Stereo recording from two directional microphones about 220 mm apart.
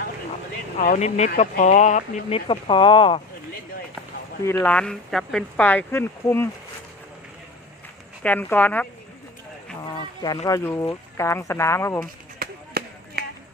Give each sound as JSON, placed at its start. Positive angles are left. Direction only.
{"t": 0.8, "sound": "speech", "side_deg": 35}
{"t": 4.4, "sound": "speech", "side_deg": 10}
{"t": 8.2, "sound": "speech", "side_deg": 5}
{"t": 10.4, "sound": "speech", "side_deg": 15}
{"t": 12.4, "sound": "chop", "side_deg": -45}